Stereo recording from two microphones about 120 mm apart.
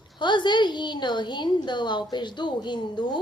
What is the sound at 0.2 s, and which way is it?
A woman's voice, 40° left (ahead or behind).